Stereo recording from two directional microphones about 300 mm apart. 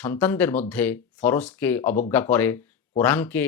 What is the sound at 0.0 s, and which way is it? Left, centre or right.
Speech, centre.